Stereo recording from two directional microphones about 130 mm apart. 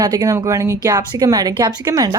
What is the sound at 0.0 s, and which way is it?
Speech, 30° right (ahead or behind).